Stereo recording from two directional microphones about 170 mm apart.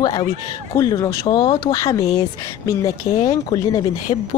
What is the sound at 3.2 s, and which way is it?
Speech, 25° left (ahead or behind).